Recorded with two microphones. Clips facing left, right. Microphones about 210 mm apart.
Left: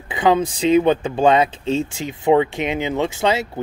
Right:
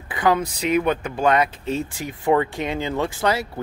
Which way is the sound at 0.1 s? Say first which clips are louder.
Left 3 dB; 25° left (ahead or behind).